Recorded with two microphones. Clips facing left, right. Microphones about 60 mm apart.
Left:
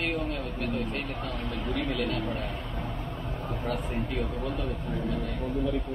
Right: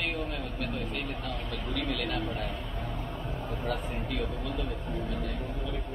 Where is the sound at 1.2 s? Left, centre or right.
Left.